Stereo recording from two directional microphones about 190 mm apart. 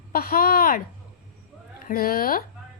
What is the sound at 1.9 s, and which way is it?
Speech, 50° left (ahead or behind).